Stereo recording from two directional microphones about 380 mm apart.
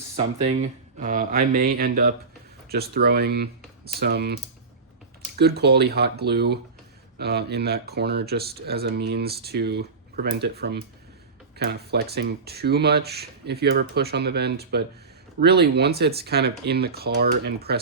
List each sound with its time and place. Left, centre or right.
0.4 s speech: centre
5.4 s speech: right